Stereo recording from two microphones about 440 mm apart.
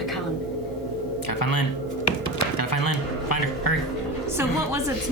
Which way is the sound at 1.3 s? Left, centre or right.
Left.